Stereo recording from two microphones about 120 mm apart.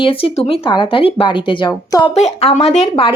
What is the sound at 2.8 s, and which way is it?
Speech, 50° left (ahead or behind).